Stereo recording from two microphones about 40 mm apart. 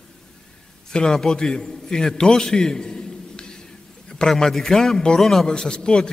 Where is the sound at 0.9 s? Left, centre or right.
Centre.